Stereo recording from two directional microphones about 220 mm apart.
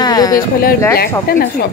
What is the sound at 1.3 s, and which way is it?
Speech, 45° left (ahead or behind).